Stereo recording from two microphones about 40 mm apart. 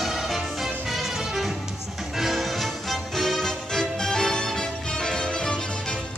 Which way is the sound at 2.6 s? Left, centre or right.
Centre.